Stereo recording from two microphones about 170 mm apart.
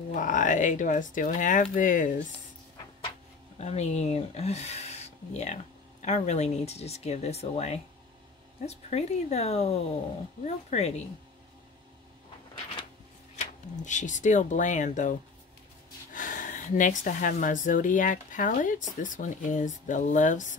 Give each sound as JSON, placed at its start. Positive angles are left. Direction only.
{"t": 0.1, "sound": "speech", "side_deg": 50}
{"t": 3.5, "sound": "speech", "side_deg": 40}
{"t": 13.4, "sound": "speech", "side_deg": 45}